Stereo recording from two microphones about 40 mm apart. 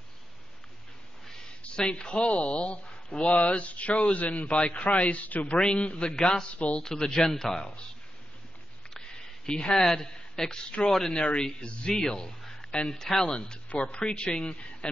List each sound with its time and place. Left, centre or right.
1.6 s speech: left
5.6 s speech: left
6.1 s speech: centre
9.5 s speech: centre
10.9 s speech: centre
11.1 s speech: left
13.7 s speech: left